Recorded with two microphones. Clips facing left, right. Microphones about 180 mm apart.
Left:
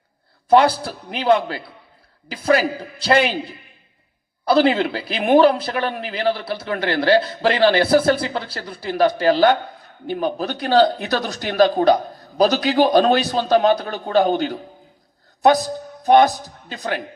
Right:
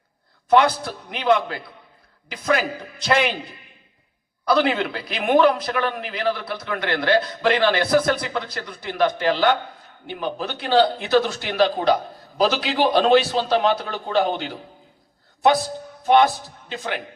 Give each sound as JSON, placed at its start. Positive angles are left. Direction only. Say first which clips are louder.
{"t": 0.5, "sound": "a man's voice", "louder": "left 3 dB", "side_deg": 30}